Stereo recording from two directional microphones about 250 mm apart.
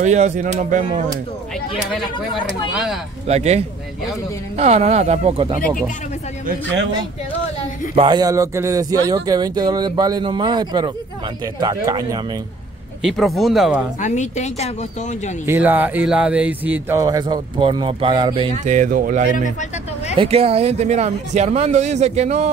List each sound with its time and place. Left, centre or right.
0.0 s speech: right
2.7 s speech: centre
3.3 s speech: right
6.4 s a man's voice: right
7.9 s speech: centre
13.0 s speech: centre
14.0 s speech: left
15.4 s speech: centre; by 22.5 s right